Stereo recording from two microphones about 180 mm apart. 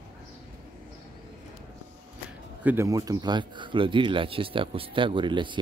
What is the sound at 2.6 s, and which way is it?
Speech, 15° right (ahead or behind).